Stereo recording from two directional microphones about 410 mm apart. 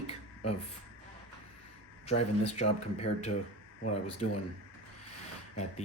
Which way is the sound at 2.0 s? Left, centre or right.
Centre.